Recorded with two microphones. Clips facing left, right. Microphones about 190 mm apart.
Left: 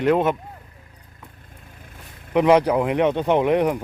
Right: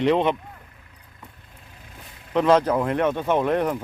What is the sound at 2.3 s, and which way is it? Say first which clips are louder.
A man's voice: left 2 dB; 15° left (ahead or behind).